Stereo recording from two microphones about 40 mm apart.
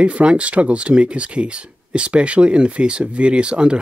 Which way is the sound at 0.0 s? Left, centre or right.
Right.